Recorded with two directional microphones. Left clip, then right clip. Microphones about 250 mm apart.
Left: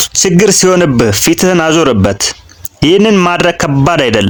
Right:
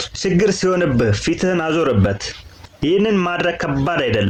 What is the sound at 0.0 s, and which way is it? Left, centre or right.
Speech, left.